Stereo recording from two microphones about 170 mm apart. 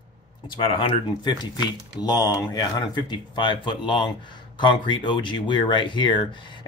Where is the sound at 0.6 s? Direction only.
30° left (ahead or behind).